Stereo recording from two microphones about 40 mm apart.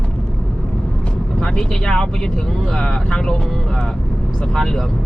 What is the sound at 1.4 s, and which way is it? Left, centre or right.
Speech, centre.